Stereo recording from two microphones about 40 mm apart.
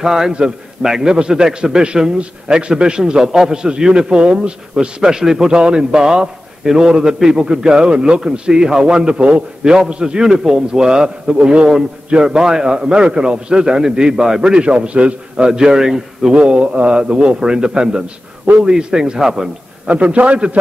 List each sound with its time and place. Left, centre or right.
0.0 s a man's voice: centre
0.3 s a man's voice: right
5.0 s a man's voice: centre
5.5 s a man's voice: right
15.3 s a man's voice: centre
16.3 s a man's voice: right; by 19.5 s centre
19.9 s a man's voice: right